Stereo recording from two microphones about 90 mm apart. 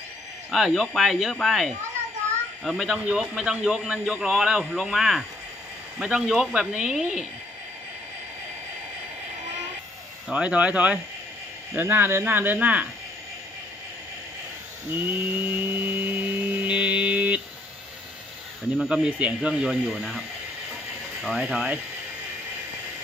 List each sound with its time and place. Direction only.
0.5 s a man's voice: 5° right (ahead or behind)
10.2 s speech: 10° right (ahead or behind)
11.7 s speech: 25° right (ahead or behind)
14.9 s mantra: 25° right (ahead or behind)
18.8 s a man's voice: 5° right (ahead or behind)
19.0 s speech: 15° right (ahead or behind)
19.9 s a man's voice: 5° left (ahead or behind); by 21.7 s 15° right (ahead or behind)